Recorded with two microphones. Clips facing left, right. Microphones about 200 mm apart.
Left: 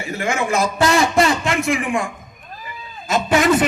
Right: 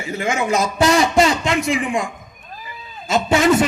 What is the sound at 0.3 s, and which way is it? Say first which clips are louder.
A man's voice: even; 20° right (ahead or behind).